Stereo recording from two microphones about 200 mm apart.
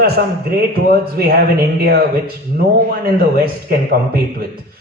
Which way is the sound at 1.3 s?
50° right (ahead or behind).